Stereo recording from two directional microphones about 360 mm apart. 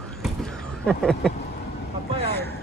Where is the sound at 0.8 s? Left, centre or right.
Centre.